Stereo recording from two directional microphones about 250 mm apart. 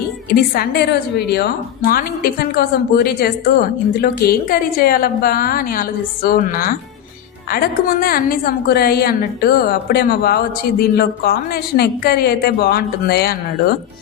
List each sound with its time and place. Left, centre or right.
0.3 s a woman's voice: left